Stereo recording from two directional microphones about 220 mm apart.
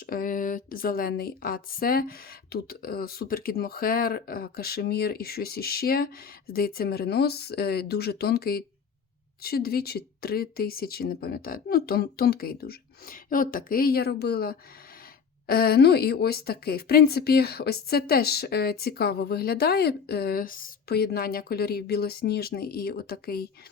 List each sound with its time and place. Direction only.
0.0 s speech: 40° left (ahead or behind)